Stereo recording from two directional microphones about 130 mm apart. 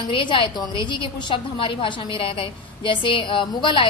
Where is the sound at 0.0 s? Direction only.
40° left (ahead or behind).